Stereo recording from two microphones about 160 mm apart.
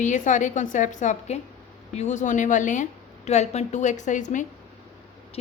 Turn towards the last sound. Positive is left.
turn(degrees=50)  # may be behind; listen again after turning